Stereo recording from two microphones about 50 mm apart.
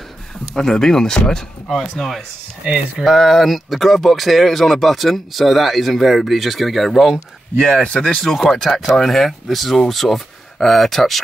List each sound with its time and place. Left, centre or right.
0.6 s speech: centre
7.6 s speech: centre
8.2 s speech: centre